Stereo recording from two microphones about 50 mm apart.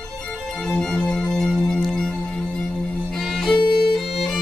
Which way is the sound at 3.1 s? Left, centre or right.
Centre.